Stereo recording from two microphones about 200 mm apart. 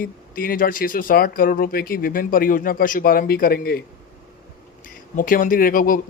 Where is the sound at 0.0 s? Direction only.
45° left (ahead or behind).